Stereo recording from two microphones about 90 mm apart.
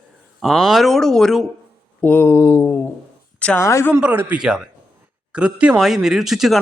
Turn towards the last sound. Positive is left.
turn(degrees=0)  # may be behind; listen again after turning